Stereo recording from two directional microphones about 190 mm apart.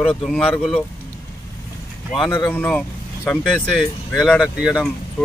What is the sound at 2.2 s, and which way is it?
Speech, 20° left (ahead or behind).